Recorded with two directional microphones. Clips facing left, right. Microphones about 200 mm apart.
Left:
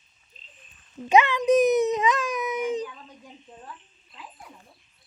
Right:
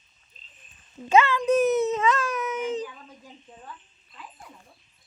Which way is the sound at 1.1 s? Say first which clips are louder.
Left 1 dB; 15° left (ahead or behind).